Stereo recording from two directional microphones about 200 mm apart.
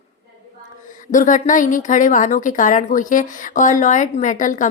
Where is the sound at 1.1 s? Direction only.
40° left (ahead or behind).